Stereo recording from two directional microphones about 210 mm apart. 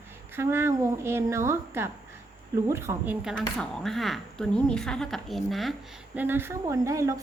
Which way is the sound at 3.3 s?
Centre (ahead or behind).